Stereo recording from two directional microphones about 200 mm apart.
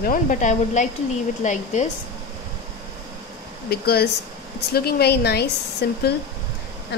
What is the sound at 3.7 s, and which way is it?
A woman's voice, 50° left (ahead or behind).